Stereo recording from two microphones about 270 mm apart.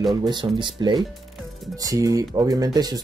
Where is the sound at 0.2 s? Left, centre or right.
Centre.